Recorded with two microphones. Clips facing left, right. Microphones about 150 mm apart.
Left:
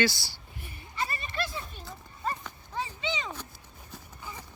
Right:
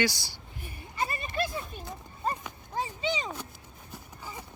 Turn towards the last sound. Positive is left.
turn(degrees=-10)  # may be behind; listen again after turning